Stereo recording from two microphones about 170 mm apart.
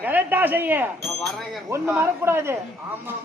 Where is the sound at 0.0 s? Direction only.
10° right (ahead or behind).